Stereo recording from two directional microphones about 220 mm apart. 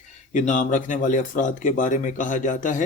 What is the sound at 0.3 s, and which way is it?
Speech, 35° left (ahead or behind).